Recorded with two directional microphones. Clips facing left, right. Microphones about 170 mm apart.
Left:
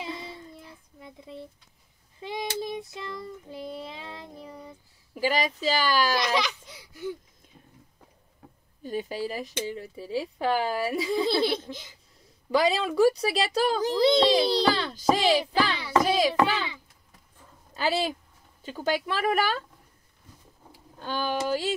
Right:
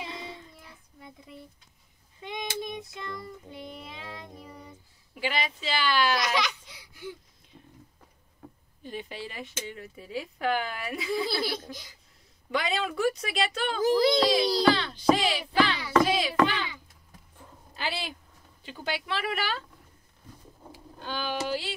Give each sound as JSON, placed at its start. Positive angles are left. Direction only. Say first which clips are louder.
{"t": 0.6, "sound": "a sound", "louder": "left 4 dB", "side_deg": 25}
{"t": 2.2, "sound": "child singing", "louder": "left 3 dB", "side_deg": 30}
{"t": 5.1, "sound": "speech", "louder": "left 5 dB", "side_deg": 40}
{"t": 8.8, "sound": "speech", "louder": "left 7 dB", "side_deg": 40}
{"t": 11.2, "sound": "laughter", "louder": "left 6 dB", "side_deg": 25}
{"t": 12.4, "sound": "a child's voice", "louder": "left 6 dB", "side_deg": 35}
{"t": 16.0, "sound": "hands", "louder": "left 1 dB", "side_deg": 40}
{"t": 17.7, "sound": "speech", "louder": "left 8 dB", "side_deg": 40}
{"t": 21.0, "sound": "speech", "louder": "left 3 dB", "side_deg": 45}